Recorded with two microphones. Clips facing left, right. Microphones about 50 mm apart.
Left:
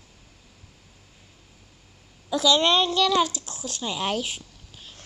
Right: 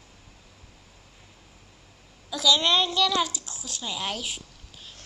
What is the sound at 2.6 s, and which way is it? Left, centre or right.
Speech, centre.